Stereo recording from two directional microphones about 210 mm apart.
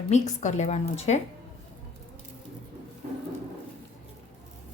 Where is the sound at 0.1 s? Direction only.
30° left (ahead or behind).